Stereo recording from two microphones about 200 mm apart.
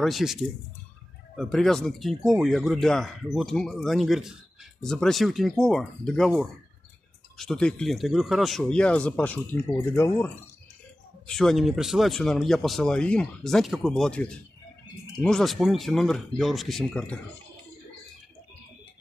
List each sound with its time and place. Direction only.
0.0 s speech: centre (ahead or behind)
11.2 s speech: centre (ahead or behind)